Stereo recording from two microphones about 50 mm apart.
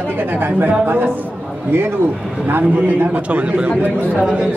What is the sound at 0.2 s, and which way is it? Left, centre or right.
Speech, right.